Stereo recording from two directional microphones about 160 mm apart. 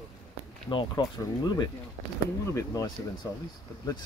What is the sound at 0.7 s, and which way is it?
Speech, 25° left (ahead or behind).